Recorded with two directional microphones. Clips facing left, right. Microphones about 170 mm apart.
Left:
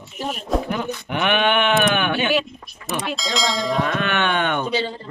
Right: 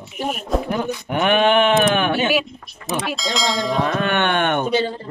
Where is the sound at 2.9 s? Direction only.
Centre (ahead or behind).